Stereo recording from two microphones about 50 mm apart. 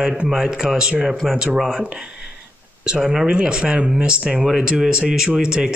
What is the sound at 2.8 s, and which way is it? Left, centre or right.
Speech, centre.